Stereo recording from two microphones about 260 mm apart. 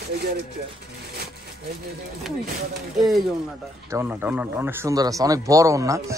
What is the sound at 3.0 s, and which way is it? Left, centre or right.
A man's voice, centre.